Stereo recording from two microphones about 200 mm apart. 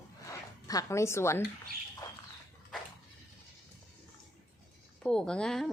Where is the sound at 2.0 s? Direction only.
20° left (ahead or behind).